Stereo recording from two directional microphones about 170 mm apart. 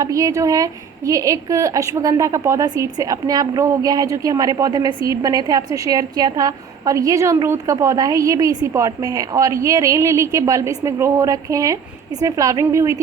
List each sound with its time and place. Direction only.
0.0 s a woman's voice: 20° right (ahead or behind)